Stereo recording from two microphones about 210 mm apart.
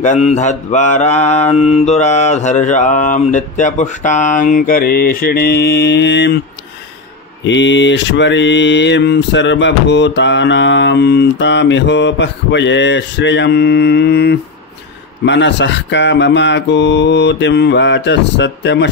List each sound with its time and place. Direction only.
0.0 s mantra: 35° left (ahead or behind); by 6.4 s 55° left (ahead or behind)
7.4 s mantra: 60° left (ahead or behind)